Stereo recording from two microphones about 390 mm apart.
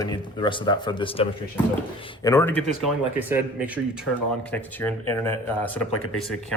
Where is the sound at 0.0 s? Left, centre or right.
Centre.